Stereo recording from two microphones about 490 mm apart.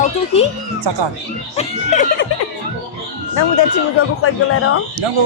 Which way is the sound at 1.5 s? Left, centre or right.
Centre.